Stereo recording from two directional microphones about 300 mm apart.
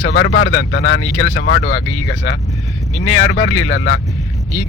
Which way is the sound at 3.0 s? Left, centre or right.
Left.